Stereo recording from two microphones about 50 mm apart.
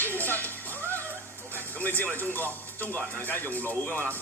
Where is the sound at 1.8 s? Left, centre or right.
Left.